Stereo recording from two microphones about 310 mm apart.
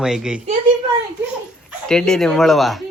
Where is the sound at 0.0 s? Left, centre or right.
Centre.